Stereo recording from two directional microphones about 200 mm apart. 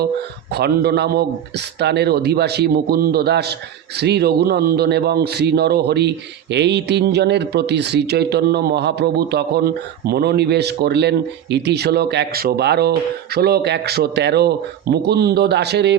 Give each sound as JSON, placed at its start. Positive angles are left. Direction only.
{"t": 0.5, "sound": "a man's voice", "side_deg": -55}